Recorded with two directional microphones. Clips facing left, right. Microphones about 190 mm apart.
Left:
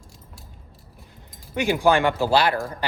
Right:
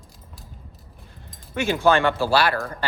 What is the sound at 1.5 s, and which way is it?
A man's voice, 15° left (ahead or behind).